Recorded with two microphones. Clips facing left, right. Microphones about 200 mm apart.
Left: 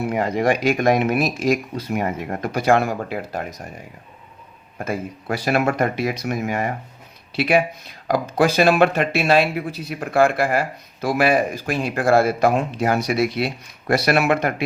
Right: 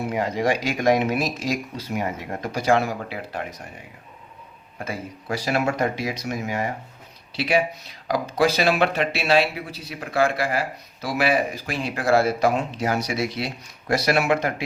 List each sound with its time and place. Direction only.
0.1 s speech: 55° left (ahead or behind)
4.9 s speech: 55° left (ahead or behind)